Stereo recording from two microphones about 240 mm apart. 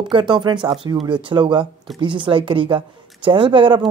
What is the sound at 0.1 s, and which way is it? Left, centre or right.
Speech, centre.